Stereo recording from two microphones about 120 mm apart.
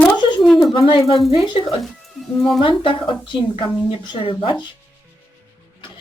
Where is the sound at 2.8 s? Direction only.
45° left (ahead or behind).